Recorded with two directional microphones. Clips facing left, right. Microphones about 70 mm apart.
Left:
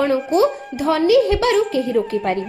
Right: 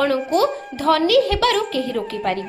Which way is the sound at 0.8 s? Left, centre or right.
Centre.